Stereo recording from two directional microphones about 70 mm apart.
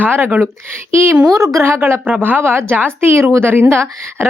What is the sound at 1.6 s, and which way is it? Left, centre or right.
A woman's voice, right.